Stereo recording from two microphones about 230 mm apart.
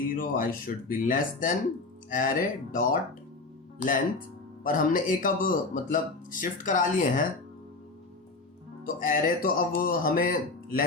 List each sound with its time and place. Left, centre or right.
0.2 s speech: left
8.8 s speech: left